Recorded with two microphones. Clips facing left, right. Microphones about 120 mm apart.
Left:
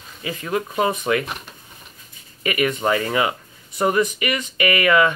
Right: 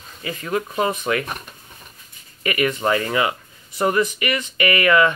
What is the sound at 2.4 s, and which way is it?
Speech, 35° right (ahead or behind).